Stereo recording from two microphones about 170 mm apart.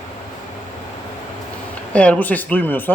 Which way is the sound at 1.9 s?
10° left (ahead or behind).